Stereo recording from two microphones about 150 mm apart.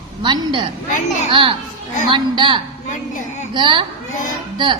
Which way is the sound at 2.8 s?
60° left (ahead or behind).